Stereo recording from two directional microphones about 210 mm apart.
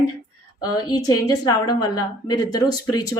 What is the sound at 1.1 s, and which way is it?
Speech, 20° left (ahead or behind).